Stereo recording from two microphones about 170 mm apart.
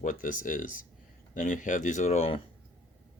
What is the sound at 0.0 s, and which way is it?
Speech, 50° left (ahead or behind).